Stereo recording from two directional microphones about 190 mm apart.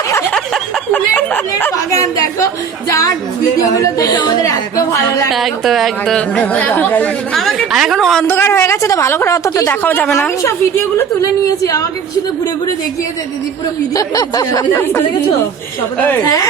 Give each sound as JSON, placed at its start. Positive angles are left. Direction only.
{"t": 0.1, "sound": "a sound", "side_deg": 15}
{"t": 0.3, "sound": "a sound", "side_deg": 5}
{"t": 3.6, "sound": "a woman's voice", "side_deg": 15}
{"t": 5.3, "sound": "speech", "side_deg": 0}
{"t": 8.4, "sound": "a woman's voice", "side_deg": 15}
{"t": 13.9, "sound": "a woman's voice", "side_deg": 20}